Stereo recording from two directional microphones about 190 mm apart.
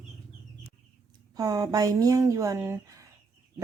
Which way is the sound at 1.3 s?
20° right (ahead or behind).